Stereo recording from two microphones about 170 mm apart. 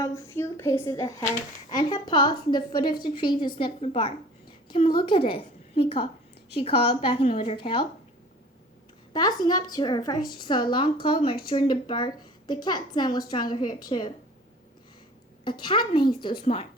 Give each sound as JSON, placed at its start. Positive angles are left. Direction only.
{"t": 0.0, "sound": "a woman's voice", "side_deg": 15}
{"t": 9.1, "sound": "speech", "side_deg": 25}
{"t": 15.4, "sound": "speech", "side_deg": 25}